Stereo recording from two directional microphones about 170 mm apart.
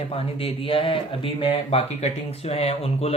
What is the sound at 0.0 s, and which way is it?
Speech, 35° left (ahead or behind).